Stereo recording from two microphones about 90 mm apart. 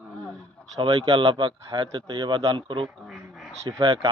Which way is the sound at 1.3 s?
70° right (ahead or behind).